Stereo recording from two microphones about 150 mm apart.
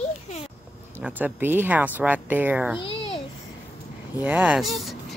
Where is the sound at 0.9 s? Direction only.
10° right (ahead or behind).